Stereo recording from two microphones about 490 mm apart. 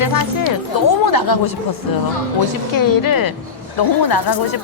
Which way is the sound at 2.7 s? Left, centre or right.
Left.